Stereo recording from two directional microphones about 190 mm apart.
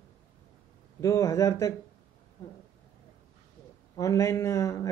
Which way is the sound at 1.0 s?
15° left (ahead or behind).